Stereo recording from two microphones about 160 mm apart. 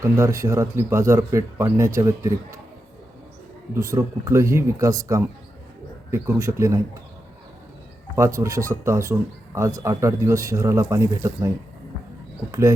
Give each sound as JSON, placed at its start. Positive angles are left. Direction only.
{"t": 0.0, "sound": "speech", "side_deg": -20}
{"t": 3.8, "sound": "speech", "side_deg": -20}
{"t": 8.1, "sound": "speech", "side_deg": -15}